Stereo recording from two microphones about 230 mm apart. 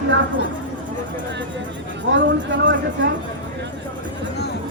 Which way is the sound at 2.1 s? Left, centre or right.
Right.